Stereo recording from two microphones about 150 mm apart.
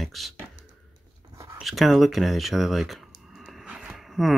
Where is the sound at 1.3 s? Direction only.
20° right (ahead or behind).